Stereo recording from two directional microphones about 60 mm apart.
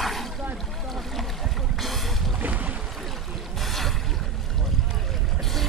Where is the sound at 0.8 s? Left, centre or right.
Centre.